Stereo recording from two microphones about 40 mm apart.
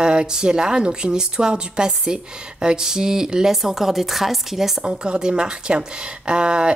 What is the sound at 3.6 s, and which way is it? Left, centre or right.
Speech, centre.